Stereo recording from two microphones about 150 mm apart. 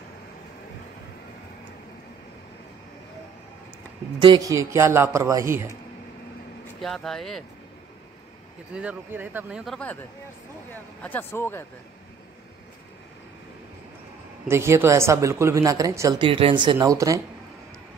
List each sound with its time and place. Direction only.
4.2 s speech: 30° right (ahead or behind)
6.8 s speech: 5° left (ahead or behind)
8.7 s speech: 10° right (ahead or behind)
9.7 s speech: 10° left (ahead or behind)
14.5 s speech: 15° right (ahead or behind)
16.2 s speech: 35° right (ahead or behind)
16.7 s speech: 20° right (ahead or behind)